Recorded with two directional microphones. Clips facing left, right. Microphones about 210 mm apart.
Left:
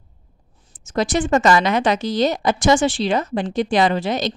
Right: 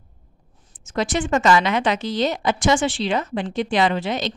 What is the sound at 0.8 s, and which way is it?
Speech, 40° left (ahead or behind).